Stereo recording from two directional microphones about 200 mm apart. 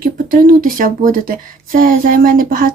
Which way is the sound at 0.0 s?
45° right (ahead or behind).